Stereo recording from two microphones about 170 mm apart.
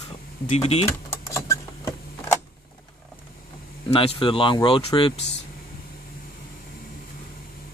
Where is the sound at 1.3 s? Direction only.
15° left (ahead or behind).